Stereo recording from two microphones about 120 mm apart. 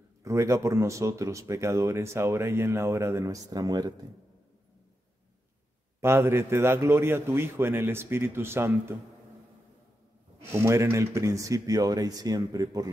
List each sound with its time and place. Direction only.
0.2 s speech: 25° right (ahead or behind)
5.9 s speech: 20° right (ahead or behind)
10.6 s speech: 25° right (ahead or behind)